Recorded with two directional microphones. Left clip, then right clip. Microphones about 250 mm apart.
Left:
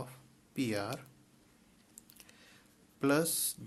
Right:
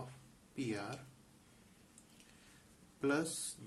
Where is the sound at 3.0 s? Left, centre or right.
Left.